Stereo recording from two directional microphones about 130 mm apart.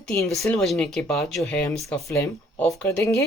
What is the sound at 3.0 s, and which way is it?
Speech, 25° left (ahead or behind).